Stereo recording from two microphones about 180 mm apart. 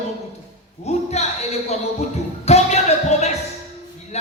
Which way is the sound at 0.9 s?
35° left (ahead or behind).